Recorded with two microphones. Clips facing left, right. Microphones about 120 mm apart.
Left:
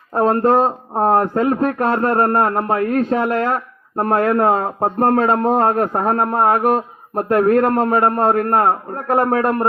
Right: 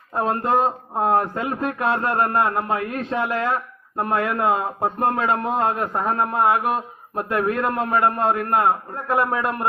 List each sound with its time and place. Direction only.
0.1 s speech: 40° left (ahead or behind)